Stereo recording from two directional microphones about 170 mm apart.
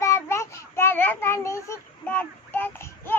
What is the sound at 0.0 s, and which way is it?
Child singing, 15° left (ahead or behind).